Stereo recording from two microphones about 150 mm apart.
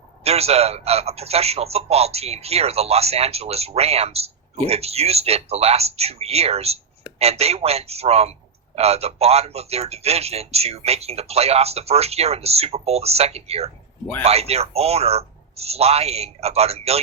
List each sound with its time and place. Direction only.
0.3 s a man's voice: 45° right (ahead or behind)